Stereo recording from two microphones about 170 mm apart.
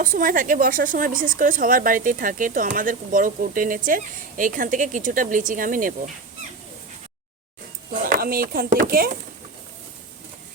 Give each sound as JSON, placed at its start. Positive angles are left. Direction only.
{"t": 0.0, "sound": "a woman's voice", "side_deg": -50}
{"t": 8.0, "sound": "speech", "side_deg": -60}